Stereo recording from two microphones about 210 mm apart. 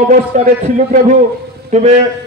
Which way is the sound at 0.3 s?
35° right (ahead or behind).